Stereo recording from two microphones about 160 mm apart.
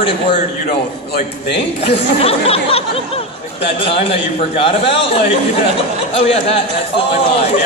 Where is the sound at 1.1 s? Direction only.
90° left.